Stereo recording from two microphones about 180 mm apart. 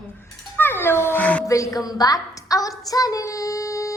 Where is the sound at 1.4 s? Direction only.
20° left (ahead or behind).